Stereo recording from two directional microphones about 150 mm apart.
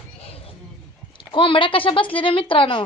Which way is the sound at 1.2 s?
35° left (ahead or behind).